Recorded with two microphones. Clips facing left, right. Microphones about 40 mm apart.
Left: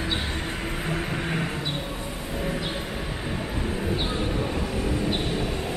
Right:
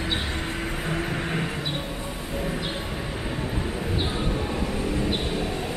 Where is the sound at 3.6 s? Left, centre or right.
Centre.